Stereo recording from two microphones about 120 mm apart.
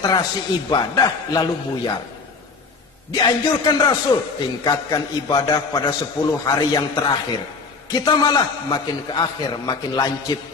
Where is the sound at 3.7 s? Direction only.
35° left (ahead or behind).